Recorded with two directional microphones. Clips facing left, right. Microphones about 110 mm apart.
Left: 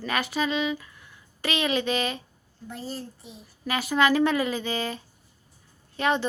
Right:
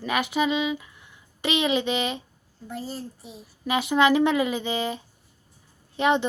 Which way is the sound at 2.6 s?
10° right (ahead or behind).